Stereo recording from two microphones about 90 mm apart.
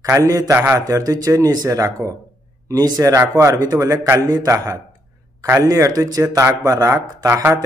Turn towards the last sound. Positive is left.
turn(degrees=-30)  # may be behind; listen again after turning